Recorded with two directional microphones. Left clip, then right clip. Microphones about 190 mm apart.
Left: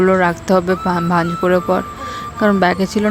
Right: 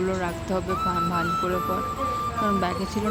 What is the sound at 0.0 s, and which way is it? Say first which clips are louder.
Speech: left 13 dB; 45° left (ahead or behind).